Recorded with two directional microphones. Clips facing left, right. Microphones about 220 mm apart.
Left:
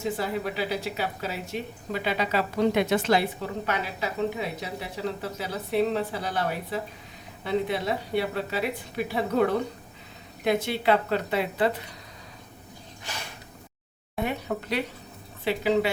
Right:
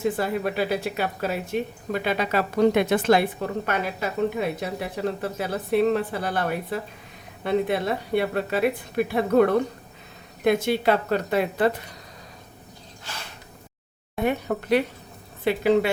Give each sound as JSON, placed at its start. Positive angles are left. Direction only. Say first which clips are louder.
{"t": 0.0, "sound": "a woman's voice", "louder": "right 4 dB", "side_deg": -55}
{"t": 14.3, "sound": "a woman's voice", "louder": "right 8 dB", "side_deg": -50}